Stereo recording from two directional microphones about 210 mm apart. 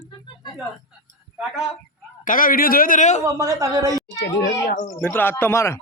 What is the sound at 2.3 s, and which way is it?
Speech, 40° left (ahead or behind).